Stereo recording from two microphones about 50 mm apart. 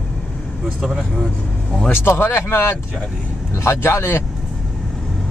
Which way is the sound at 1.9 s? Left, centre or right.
Left.